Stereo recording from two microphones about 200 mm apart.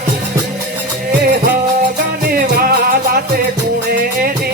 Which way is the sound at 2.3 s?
50° right (ahead or behind).